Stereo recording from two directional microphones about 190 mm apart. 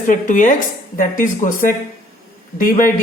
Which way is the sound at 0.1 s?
45° left (ahead or behind).